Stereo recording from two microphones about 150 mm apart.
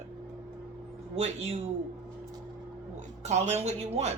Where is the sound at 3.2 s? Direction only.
50° right (ahead or behind).